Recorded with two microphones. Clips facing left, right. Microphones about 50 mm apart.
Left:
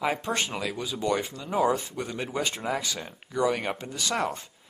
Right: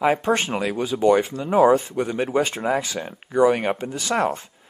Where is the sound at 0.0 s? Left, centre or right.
Right.